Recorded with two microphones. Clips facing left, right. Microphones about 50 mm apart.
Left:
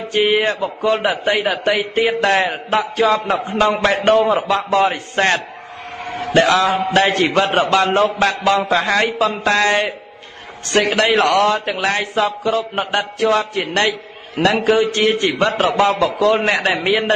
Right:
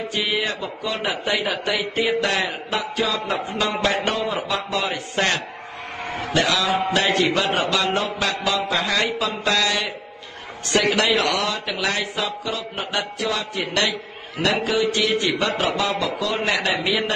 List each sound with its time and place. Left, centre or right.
0.1 s a man's voice: left